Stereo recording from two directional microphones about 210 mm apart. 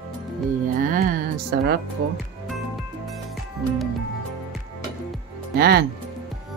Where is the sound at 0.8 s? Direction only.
40° right (ahead or behind).